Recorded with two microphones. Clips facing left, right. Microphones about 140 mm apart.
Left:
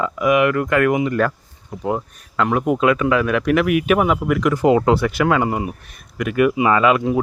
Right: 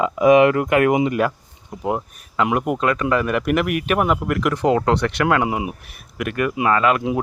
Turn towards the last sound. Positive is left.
turn(degrees=0)  # may be behind; listen again after turning